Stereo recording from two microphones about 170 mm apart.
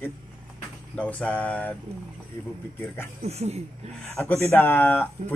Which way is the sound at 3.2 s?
40° right (ahead or behind).